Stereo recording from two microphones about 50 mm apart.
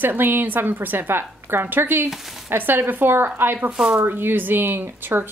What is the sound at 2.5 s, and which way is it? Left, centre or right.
Speech, right.